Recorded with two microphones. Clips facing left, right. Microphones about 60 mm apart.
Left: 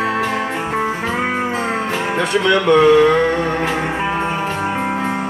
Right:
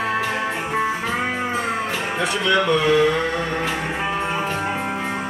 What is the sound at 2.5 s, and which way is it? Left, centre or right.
Music, left.